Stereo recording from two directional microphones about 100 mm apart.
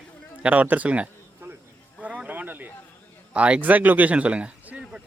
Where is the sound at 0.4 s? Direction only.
15° right (ahead or behind).